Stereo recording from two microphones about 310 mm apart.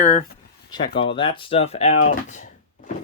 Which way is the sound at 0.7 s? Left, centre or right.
Centre.